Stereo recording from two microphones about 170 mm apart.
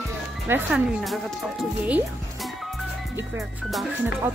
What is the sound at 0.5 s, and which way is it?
Speech, 5° right (ahead or behind).